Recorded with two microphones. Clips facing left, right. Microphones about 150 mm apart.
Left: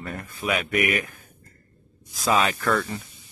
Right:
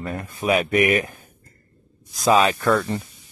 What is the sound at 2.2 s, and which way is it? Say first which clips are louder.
Speech: right 5 dB; 20° right (ahead or behind).